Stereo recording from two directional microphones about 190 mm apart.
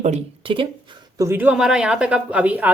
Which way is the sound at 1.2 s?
10° right (ahead or behind).